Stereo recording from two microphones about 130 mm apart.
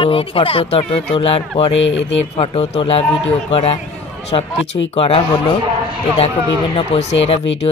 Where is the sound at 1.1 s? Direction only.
45° left (ahead or behind).